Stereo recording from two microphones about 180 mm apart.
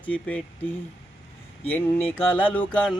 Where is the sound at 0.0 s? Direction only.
5° left (ahead or behind).